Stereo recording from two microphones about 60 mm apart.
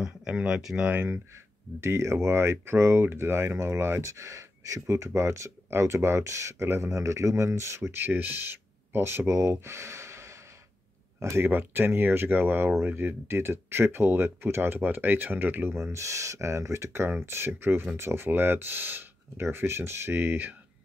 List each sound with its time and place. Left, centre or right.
0.0 s a sound: centre
0.5 s speech: centre
1.0 s speech: right
11.4 s speech: right